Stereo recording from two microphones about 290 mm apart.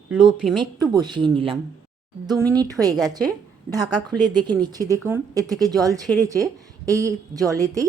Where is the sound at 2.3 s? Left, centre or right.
Centre.